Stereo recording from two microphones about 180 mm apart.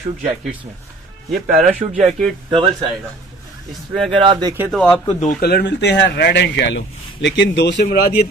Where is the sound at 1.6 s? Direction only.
40° right (ahead or behind).